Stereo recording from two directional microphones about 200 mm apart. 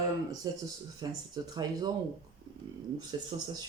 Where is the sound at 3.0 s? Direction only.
20° right (ahead or behind).